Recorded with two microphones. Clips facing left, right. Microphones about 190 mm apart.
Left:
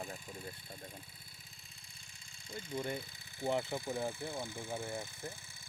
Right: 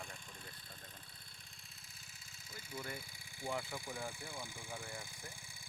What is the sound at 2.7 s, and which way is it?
Speech, 45° left (ahead or behind).